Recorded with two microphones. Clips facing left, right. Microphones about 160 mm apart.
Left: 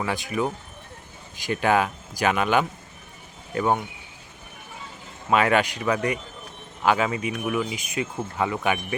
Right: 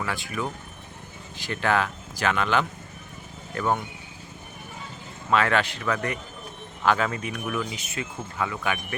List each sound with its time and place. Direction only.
0.0 s speech: 20° left (ahead or behind)
5.3 s speech: 15° left (ahead or behind)
8.4 s speech: 25° left (ahead or behind)